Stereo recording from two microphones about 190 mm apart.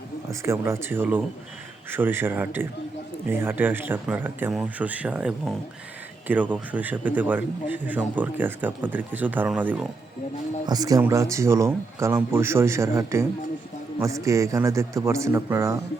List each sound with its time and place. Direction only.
0.3 s a man's voice: 15° right (ahead or behind)
10.7 s a man's voice: 20° right (ahead or behind)